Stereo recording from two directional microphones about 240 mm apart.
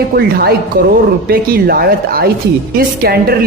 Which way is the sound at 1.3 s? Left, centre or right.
Right.